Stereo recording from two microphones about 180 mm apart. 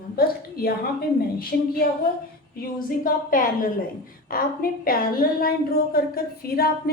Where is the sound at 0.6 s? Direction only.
60° left (ahead or behind).